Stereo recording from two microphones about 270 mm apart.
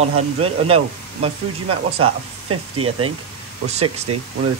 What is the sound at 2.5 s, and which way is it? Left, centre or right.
Speech, right.